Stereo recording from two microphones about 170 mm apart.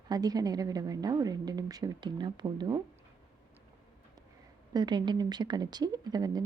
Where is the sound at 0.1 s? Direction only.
20° right (ahead or behind).